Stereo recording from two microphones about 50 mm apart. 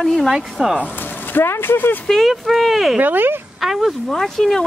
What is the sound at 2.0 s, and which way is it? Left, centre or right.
Speech, centre.